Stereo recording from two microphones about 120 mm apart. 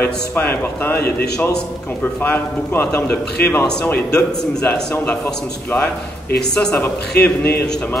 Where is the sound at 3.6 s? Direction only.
5° left (ahead or behind).